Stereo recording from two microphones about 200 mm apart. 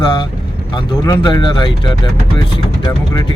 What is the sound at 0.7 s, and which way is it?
Speech, 20° left (ahead or behind).